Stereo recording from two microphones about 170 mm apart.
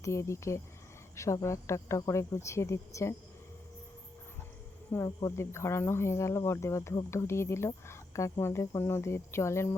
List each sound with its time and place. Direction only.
0.0 s speech: 15° left (ahead or behind)
4.9 s speech: 20° left (ahead or behind)